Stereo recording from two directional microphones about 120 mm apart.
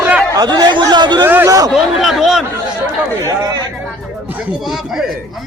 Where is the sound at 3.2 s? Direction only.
35° right (ahead or behind).